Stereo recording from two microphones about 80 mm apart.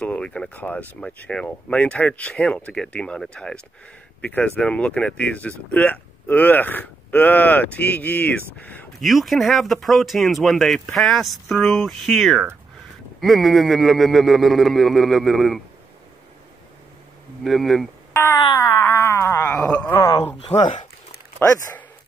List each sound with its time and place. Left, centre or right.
0.0 s speech: centre
9.0 s speech: centre
17.4 s speech: centre
18.1 s wail: left
18.9 s a sound: left
19.5 s a sound: centre
19.9 s speech: left